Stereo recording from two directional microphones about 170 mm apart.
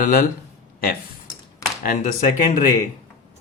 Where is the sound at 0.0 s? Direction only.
55° left (ahead or behind).